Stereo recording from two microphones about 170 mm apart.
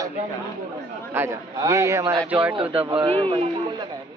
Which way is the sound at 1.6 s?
20° right (ahead or behind).